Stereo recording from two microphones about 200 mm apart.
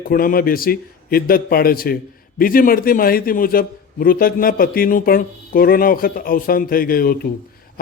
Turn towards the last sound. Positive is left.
turn(degrees=45)  # may be behind; listen again after turning